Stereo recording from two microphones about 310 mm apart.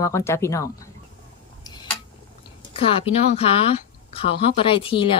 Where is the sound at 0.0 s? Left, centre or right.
Centre.